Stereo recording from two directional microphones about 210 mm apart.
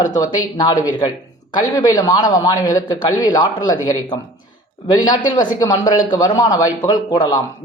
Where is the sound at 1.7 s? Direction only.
15° left (ahead or behind).